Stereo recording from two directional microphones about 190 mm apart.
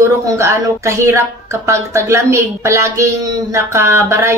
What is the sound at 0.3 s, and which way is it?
Speech, 15° right (ahead or behind).